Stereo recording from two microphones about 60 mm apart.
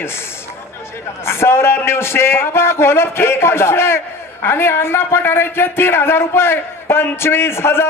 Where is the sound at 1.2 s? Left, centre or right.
Left.